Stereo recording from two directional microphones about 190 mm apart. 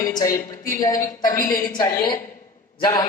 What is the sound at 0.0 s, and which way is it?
A woman's voice, 20° left (ahead or behind).